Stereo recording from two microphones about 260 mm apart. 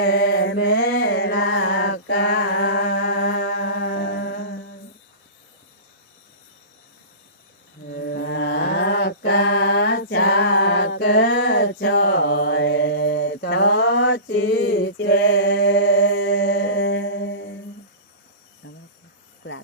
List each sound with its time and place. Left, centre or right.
0.0 s mantra: left
7.9 s mantra: left